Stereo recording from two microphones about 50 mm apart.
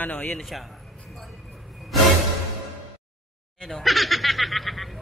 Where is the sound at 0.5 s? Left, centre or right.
Centre.